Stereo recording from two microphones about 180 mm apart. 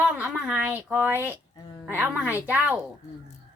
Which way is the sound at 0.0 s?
10° right (ahead or behind).